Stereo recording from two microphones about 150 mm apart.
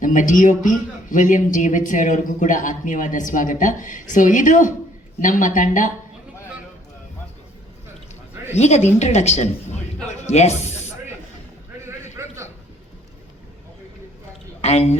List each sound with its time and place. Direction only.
0.0 s a man's voice: 60° left (ahead or behind)
8.5 s speech: 50° left (ahead or behind)
12.2 s a sound: 20° right (ahead or behind)
14.6 s speech: 45° left (ahead or behind)